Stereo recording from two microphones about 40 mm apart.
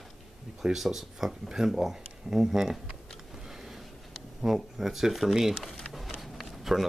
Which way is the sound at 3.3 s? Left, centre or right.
Centre.